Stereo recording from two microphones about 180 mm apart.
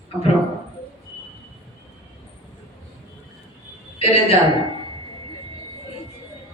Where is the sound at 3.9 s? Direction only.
30° left (ahead or behind).